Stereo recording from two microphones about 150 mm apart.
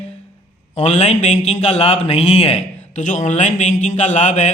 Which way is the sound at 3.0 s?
55° left (ahead or behind).